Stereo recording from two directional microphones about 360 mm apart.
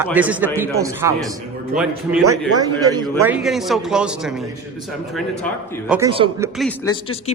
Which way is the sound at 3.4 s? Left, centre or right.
Centre.